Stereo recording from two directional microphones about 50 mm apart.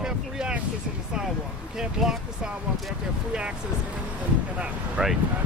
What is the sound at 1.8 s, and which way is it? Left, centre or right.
Speech, centre.